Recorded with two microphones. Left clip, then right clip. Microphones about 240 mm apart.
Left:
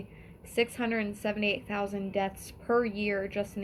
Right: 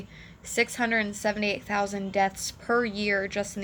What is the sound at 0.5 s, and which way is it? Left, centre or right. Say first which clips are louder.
A woman's voice: right 4 dB; centre.